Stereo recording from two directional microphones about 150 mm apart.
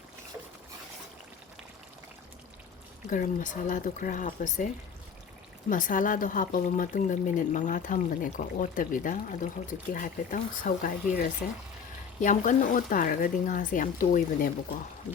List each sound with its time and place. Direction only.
3.1 s speech: 60° left (ahead or behind)